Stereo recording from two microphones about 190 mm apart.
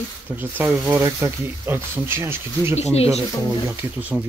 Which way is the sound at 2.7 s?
35° left (ahead or behind).